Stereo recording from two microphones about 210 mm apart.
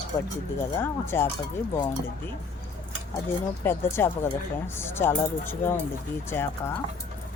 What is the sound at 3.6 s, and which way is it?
Speech, 10° left (ahead or behind).